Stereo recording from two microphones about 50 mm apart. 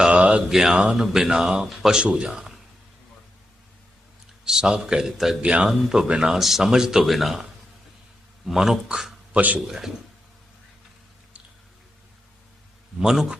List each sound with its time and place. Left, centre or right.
0.1 s mantra: right
0.4 s speech: centre
0.7 s a man's voice: right
0.9 s speech: centre
1.6 s speech: centre
2.0 s a man's voice: centre
4.4 s speech: centre
5.4 s a man's voice: right
5.6 s speech: centre
8.4 s speech: centre
9.3 s speech: right
9.6 s speech: centre
13.0 s speech: centre